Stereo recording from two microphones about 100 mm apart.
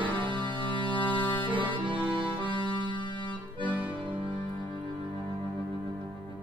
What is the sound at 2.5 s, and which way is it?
Music, 50° left (ahead or behind).